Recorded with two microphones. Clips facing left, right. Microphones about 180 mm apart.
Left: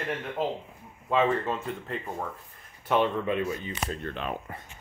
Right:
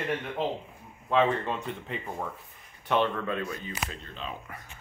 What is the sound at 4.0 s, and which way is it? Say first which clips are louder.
Speech: left 6 dB; 60° left (ahead or behind).